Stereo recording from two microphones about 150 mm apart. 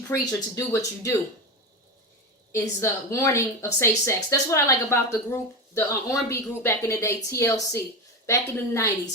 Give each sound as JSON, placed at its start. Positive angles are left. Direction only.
{"t": 0.1, "sound": "a woman's voice", "side_deg": 20}
{"t": 2.5, "sound": "a woman's voice", "side_deg": 20}